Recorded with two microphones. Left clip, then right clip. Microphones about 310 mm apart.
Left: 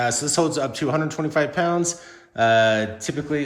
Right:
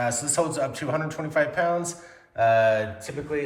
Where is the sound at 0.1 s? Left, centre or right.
Left.